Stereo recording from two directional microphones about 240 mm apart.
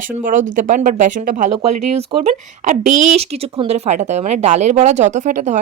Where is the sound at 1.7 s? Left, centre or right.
Right.